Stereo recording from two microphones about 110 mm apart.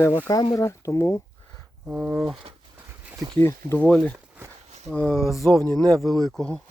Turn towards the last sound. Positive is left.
turn(degrees=5)  # may be behind; listen again after turning